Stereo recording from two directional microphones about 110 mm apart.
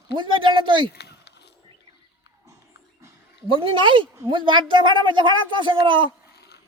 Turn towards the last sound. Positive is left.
turn(degrees=-50)  # may be behind; listen again after turning